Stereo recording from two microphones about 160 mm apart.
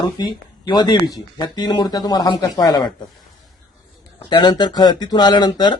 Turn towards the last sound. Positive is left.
turn(degrees=25)  # may be behind; listen again after turning